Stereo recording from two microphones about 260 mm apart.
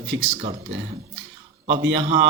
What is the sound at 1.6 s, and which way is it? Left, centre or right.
Speech, right.